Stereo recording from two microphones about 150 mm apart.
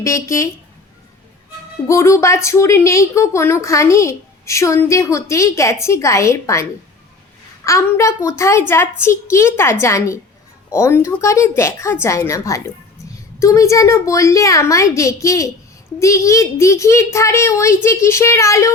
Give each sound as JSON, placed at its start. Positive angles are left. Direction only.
{"t": 0.0, "sound": "a woman's voice", "side_deg": 20}
{"t": 1.9, "sound": "a woman's voice", "side_deg": 20}